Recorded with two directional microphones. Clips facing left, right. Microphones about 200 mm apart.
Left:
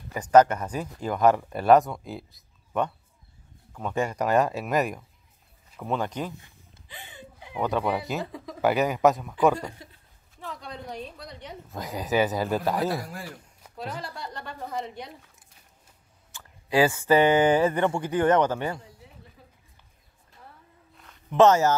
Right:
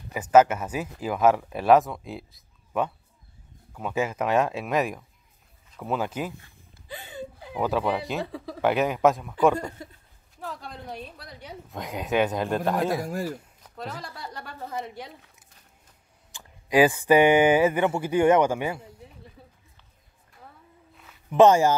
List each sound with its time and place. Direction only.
0.1 s a woman's voice: 5° right (ahead or behind)
7.0 s a sound: 40° right (ahead or behind)
7.5 s a woman's voice: centre (ahead or behind)
13.0 s speech: 45° right (ahead or behind)
13.8 s a woman's voice: 5° right (ahead or behind)
16.3 s speech: 15° right (ahead or behind)
20.9 s a sound: 5° right (ahead or behind)